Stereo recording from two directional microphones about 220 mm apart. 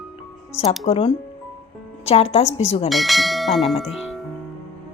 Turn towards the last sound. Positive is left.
turn(degrees=0)  # may be behind; listen again after turning